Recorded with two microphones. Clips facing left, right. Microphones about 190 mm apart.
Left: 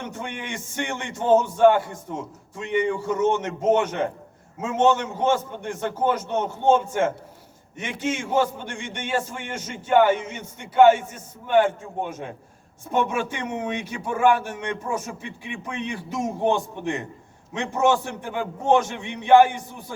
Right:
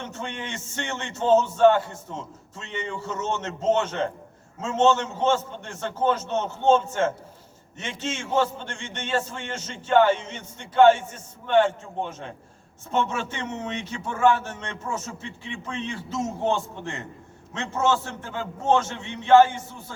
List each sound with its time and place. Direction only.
0.0 s a man's voice: 10° left (ahead or behind)